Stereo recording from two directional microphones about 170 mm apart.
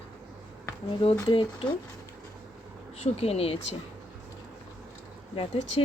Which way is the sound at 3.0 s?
35° left (ahead or behind).